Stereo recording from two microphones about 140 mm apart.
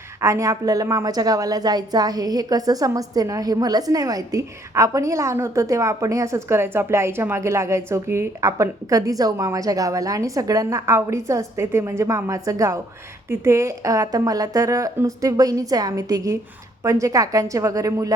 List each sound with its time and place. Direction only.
0.2 s a woman's voice: 20° right (ahead or behind)